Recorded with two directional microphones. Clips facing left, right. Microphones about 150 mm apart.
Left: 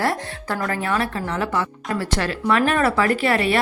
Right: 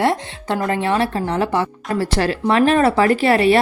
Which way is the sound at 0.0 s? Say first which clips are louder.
Right 4 dB; 20° right (ahead or behind).